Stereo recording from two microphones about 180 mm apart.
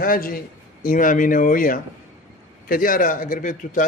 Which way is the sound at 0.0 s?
55° left (ahead or behind).